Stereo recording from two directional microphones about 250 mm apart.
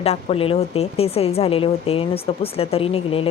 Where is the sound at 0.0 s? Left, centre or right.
Left.